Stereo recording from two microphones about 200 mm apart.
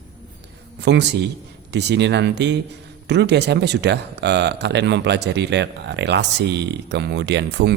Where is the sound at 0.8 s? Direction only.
60° right (ahead or behind).